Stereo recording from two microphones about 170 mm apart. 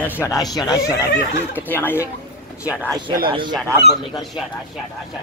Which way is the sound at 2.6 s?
5° right (ahead or behind).